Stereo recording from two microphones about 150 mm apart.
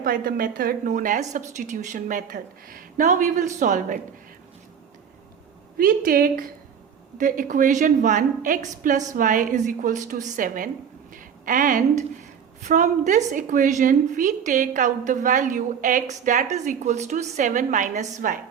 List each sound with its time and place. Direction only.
0.0 s a woman's voice: 70° right (ahead or behind)
5.7 s a woman's voice: 75° right (ahead or behind); by 18.1 s 55° right (ahead or behind)